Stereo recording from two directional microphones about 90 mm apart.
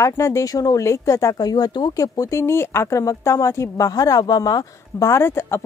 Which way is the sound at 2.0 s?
35° left (ahead or behind).